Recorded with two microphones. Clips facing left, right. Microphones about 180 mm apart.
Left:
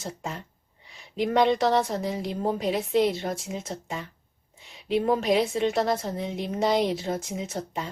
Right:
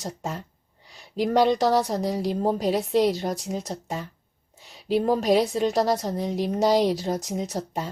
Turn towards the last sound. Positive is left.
turn(degrees=-40)  # may be behind; listen again after turning